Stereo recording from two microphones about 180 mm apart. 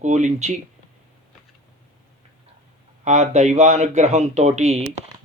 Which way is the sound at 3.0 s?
40° right (ahead or behind).